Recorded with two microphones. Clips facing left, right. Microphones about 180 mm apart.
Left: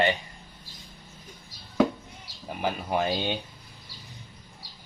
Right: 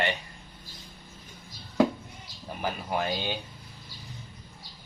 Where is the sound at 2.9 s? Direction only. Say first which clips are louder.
Left 3 dB; 25° left (ahead or behind).